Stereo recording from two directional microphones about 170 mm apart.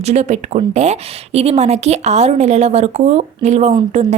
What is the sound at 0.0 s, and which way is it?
A woman's voice, 40° right (ahead or behind).